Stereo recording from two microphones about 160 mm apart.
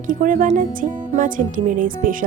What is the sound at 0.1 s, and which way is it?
Speech, 60° right (ahead or behind).